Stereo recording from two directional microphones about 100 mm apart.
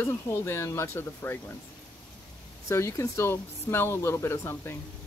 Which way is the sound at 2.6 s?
30° left (ahead or behind).